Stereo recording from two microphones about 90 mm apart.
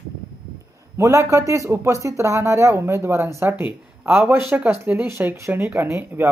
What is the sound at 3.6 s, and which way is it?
Speech, 20° right (ahead or behind).